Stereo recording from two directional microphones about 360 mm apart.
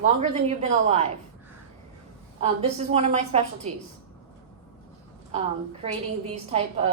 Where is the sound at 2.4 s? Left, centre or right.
Centre.